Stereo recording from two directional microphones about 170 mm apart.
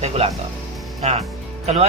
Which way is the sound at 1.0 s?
40° right (ahead or behind).